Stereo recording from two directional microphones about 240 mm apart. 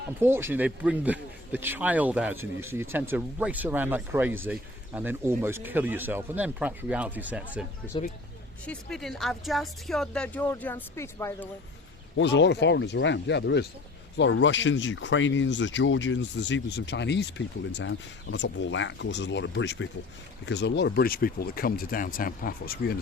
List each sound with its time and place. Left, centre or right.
0.2 s a man's voice: centre
8.6 s a woman's voice: centre
12.1 s speech: left